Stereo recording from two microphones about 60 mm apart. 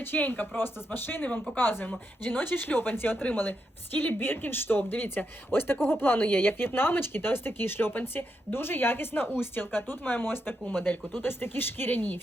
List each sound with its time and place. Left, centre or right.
0.0 s speech: left